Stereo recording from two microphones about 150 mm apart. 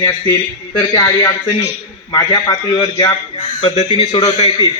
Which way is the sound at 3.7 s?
40° left (ahead or behind).